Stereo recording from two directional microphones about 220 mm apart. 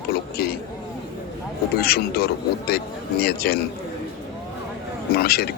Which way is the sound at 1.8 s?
45° left (ahead or behind).